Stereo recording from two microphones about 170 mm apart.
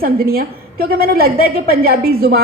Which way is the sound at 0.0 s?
60° right (ahead or behind).